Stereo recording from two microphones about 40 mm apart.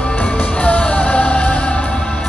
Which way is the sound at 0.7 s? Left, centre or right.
Left.